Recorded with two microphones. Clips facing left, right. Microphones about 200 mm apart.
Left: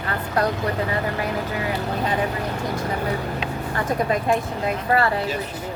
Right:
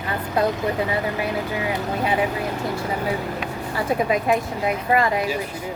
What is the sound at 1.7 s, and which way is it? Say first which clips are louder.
Speech: right 2 dB; 10° right (ahead or behind).